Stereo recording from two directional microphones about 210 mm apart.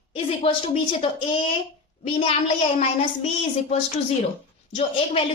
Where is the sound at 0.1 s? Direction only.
25° left (ahead or behind).